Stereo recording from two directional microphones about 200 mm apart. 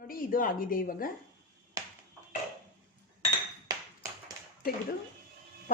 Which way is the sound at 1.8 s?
20° right (ahead or behind).